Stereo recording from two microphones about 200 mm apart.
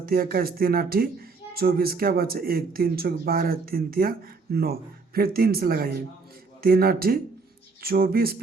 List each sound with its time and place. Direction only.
0.0 s speech: 50° right (ahead or behind)